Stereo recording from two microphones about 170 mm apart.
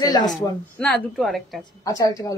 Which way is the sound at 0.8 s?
5° left (ahead or behind).